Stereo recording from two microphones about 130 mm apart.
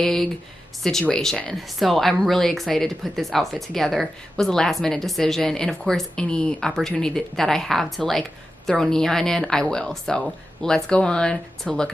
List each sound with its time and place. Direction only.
0.0 s speech: 5° left (ahead or behind)